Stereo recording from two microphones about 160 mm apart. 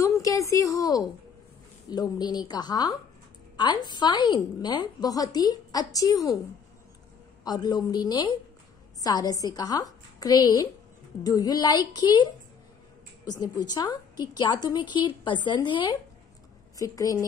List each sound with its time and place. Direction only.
0.0 s a sound: 20° left (ahead or behind)
1.9 s a woman's voice: 25° left (ahead or behind)
7.4 s a woman's voice: 25° left (ahead or behind)